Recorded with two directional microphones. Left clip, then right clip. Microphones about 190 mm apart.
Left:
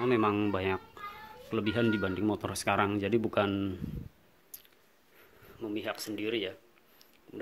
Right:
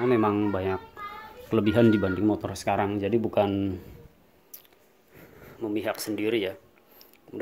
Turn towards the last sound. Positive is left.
turn(degrees=-10)  # may be behind; listen again after turning